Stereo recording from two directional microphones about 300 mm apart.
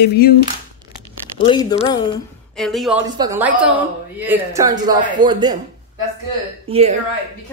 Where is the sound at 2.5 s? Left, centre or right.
Centre.